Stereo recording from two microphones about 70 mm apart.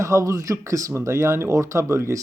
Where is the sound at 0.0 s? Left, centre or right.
Right.